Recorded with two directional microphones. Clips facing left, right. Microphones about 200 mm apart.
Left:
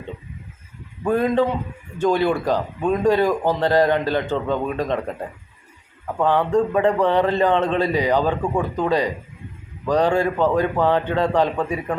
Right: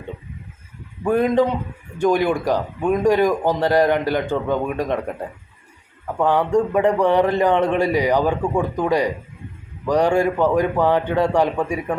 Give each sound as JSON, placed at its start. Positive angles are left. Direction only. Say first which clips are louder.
{"t": 1.0, "sound": "a man's voice", "louder": "right 2 dB", "side_deg": -15}
{"t": 6.1, "sound": "a man's voice", "louder": "right 1 dB", "side_deg": -10}